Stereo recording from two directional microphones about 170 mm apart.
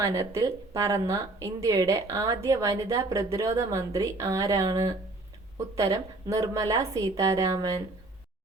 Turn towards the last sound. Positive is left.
turn(degrees=-20)  # may be behind; listen again after turning